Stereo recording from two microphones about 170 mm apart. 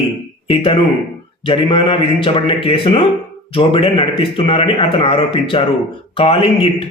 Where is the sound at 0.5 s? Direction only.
35° left (ahead or behind).